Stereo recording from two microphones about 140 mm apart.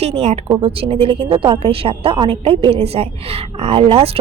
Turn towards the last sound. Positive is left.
turn(degrees=-45)  # may be behind; listen again after turning